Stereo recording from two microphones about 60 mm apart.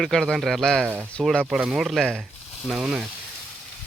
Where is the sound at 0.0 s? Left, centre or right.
Centre.